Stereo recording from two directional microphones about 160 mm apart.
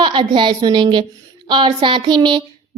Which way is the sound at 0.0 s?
30° right (ahead or behind).